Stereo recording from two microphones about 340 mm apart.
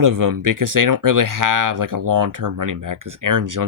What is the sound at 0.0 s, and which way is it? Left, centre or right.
Speech, right.